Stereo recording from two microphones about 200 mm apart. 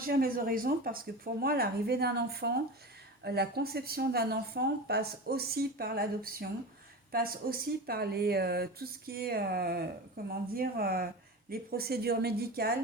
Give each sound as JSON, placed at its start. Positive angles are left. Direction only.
{"t": 0.0, "sound": "a woman's voice", "side_deg": -45}